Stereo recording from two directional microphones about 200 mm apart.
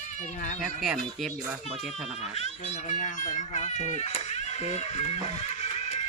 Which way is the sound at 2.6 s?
35° left (ahead or behind).